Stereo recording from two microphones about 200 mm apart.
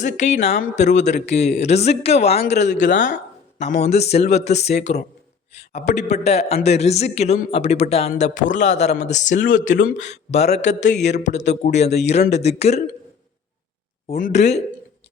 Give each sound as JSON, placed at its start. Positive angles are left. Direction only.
{"t": 0.0, "sound": "a man's voice", "side_deg": 35}
{"t": 3.6, "sound": "a man's voice", "side_deg": 35}
{"t": 14.1, "sound": "a man's voice", "side_deg": 40}